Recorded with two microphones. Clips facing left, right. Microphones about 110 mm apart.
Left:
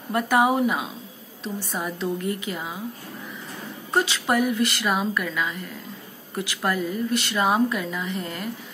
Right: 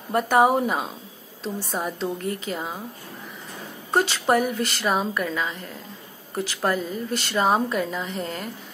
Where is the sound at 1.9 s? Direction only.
30° right (ahead or behind).